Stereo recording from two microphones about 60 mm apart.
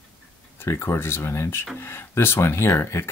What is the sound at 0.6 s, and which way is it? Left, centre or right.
Speech, left.